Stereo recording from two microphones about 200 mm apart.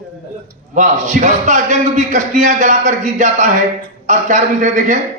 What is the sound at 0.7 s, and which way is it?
A man's voice, 40° right (ahead or behind).